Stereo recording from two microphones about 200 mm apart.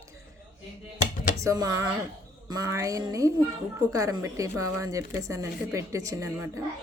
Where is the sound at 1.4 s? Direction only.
15° right (ahead or behind).